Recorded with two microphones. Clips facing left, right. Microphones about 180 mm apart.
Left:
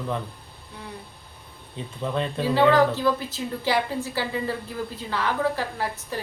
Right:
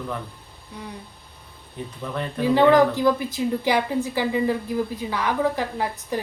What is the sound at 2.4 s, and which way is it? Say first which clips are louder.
A woman's voice: right 3 dB; 15° right (ahead or behind).